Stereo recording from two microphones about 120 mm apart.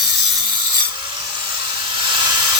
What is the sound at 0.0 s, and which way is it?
Wood, 35° right (ahead or behind).